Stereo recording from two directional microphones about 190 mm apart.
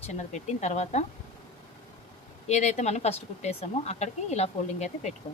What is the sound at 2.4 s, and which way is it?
Speech, 35° left (ahead or behind).